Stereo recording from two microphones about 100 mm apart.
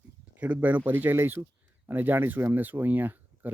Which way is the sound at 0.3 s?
15° right (ahead or behind).